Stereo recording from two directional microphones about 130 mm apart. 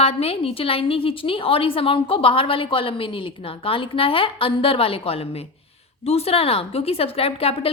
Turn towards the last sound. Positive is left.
turn(degrees=45)  # may be behind; listen again after turning